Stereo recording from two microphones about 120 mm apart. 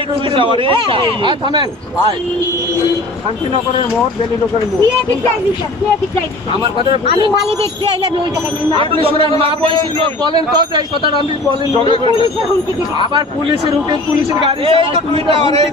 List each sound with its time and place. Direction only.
0.4 s speech: 45° right (ahead or behind)
8.7 s speech: 50° right (ahead or behind)
11.8 s speech: 50° right (ahead or behind)
14.6 s a man's voice: 50° right (ahead or behind)